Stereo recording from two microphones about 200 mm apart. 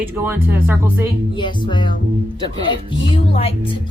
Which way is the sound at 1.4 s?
25° left (ahead or behind).